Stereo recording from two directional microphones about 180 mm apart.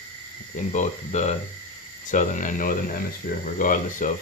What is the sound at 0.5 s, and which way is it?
Speech, 40° left (ahead or behind).